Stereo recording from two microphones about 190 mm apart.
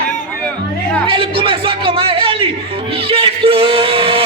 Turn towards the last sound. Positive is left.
turn(degrees=-30)  # may be behind; listen again after turning